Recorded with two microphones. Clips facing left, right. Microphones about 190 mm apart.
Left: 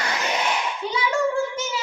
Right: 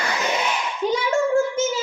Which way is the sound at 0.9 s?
45° right (ahead or behind).